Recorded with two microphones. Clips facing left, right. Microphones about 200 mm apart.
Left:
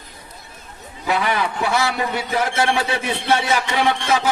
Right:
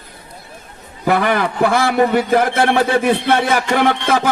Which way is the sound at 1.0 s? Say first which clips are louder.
Right 5 dB; 55° right (ahead or behind).